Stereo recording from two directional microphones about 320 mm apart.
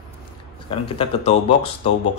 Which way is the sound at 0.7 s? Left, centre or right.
Centre.